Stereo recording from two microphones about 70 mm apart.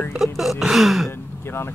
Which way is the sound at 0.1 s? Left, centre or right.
Centre.